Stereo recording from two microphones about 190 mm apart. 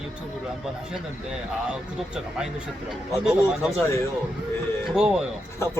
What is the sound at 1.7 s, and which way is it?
Speech, 5° right (ahead or behind).